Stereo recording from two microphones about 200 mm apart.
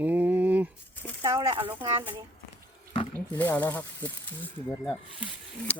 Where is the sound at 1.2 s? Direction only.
20° right (ahead or behind).